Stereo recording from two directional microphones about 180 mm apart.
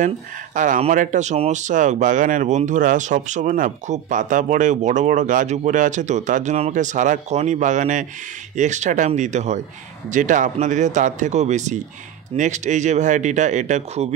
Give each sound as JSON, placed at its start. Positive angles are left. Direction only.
{"t": 0.6, "sound": "speech", "side_deg": -45}